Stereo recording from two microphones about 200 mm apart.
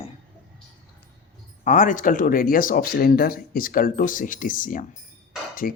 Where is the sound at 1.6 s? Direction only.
40° left (ahead or behind).